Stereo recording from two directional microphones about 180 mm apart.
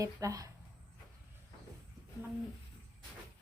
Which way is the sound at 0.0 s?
20° right (ahead or behind).